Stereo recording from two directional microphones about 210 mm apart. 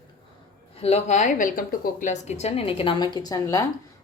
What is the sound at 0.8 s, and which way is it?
A woman's voice, 30° left (ahead or behind).